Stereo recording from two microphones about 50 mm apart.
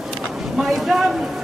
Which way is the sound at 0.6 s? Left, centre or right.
Centre.